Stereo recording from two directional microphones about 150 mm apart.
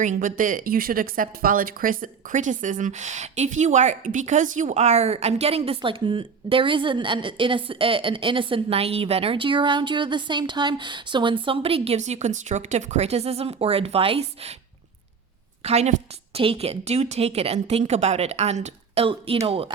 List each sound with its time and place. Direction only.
0.0 s speech: 60° right (ahead or behind); by 14.5 s 40° right (ahead or behind)
15.6 s a woman's voice: 45° right (ahead or behind)